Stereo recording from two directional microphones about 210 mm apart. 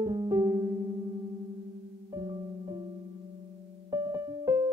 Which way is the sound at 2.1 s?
20° right (ahead or behind).